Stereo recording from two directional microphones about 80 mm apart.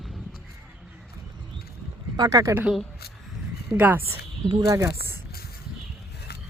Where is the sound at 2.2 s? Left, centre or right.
Right.